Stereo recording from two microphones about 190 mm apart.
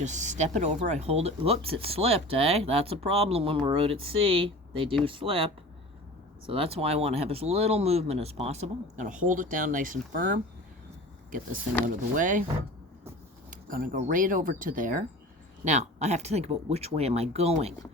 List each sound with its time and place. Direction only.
0.0 s speech: 40° right (ahead or behind)
6.5 s speech: 30° right (ahead or behind); by 10.4 s 45° right (ahead or behind)
12.1 s speech: 45° right (ahead or behind)
13.5 s speech: 45° right (ahead or behind)